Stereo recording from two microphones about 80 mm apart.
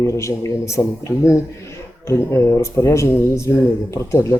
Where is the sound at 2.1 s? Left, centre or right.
Left.